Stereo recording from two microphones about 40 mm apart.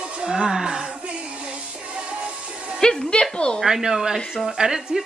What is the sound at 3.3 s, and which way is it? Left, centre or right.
Speech, left.